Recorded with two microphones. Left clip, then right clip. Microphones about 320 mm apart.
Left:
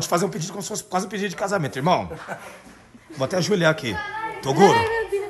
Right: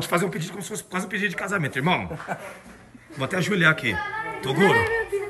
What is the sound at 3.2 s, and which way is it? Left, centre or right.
Speech, centre.